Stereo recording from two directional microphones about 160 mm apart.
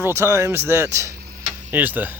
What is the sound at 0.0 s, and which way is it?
Speech, 15° right (ahead or behind).